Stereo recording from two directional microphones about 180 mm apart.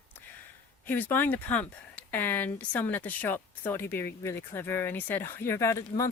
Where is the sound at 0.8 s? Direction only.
10° left (ahead or behind).